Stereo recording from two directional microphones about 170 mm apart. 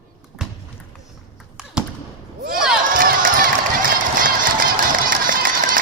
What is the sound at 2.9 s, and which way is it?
Run, 55° right (ahead or behind).